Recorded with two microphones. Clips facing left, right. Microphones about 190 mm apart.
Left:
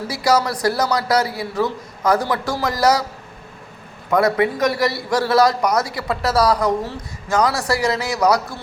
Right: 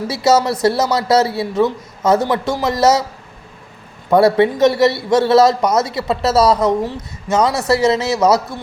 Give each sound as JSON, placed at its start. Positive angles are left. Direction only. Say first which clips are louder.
{"t": 0.1, "sound": "a man's voice", "louder": "right 4 dB", "side_deg": -25}
{"t": 4.1, "sound": "a man's voice", "louder": "right 5 dB", "side_deg": -30}